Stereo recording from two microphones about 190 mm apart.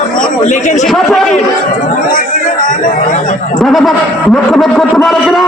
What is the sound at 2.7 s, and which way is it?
Speech, 40° left (ahead or behind).